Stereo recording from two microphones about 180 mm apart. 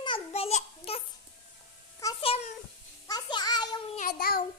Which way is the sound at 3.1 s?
20° left (ahead or behind).